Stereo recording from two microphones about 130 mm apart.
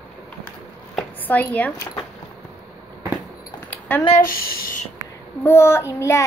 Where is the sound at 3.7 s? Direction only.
15° left (ahead or behind).